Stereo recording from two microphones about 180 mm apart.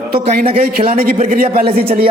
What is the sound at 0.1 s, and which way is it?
A man's voice, 60° right (ahead or behind).